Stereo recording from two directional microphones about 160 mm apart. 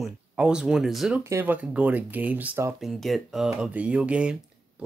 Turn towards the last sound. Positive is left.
turn(degrees=-5)  # may be behind; listen again after turning